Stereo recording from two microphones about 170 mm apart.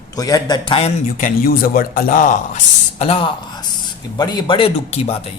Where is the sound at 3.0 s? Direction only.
30° left (ahead or behind).